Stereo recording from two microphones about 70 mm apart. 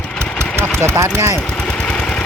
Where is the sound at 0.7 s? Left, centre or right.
Right.